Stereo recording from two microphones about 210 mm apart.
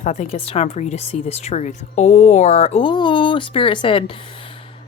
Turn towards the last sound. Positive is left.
turn(degrees=25)  # may be behind; listen again after turning